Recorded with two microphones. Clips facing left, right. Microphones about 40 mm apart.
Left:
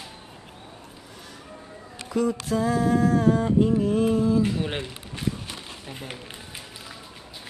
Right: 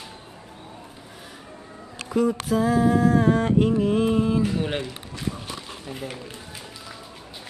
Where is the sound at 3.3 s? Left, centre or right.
Right.